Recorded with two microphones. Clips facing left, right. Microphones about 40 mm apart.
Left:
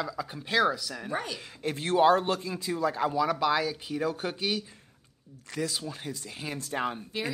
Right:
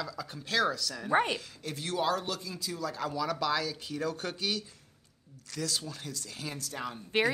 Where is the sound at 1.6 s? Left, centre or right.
Left.